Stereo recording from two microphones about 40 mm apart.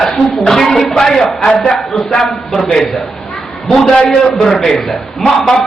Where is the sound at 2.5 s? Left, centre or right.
Centre.